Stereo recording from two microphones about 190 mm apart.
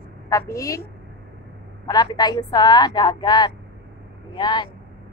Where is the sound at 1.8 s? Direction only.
20° left (ahead or behind).